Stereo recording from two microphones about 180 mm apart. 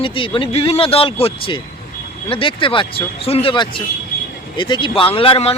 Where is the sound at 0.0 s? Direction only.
30° left (ahead or behind).